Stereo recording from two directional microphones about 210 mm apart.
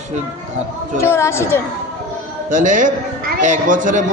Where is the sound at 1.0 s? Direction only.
10° left (ahead or behind).